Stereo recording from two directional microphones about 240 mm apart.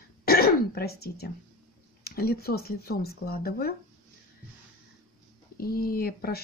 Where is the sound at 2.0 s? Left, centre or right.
Left.